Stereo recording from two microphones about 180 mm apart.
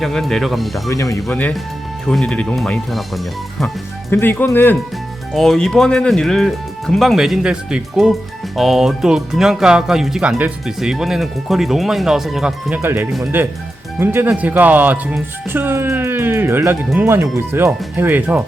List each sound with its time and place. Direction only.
0.0 s speech: centre (ahead or behind)
0.9 s speech: 15° left (ahead or behind)
1.1 s speech: 5° left (ahead or behind)
4.1 s speech: 10° left (ahead or behind)
12.8 s speech: 15° right (ahead or behind)